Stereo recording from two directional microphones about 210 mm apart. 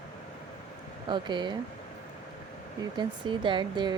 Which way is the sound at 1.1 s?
20° right (ahead or behind).